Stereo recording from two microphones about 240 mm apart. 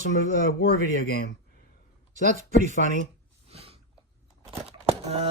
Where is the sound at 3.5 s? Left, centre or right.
Right.